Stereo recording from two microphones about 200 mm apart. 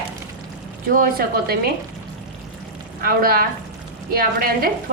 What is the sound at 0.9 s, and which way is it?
Speech, 50° right (ahead or behind).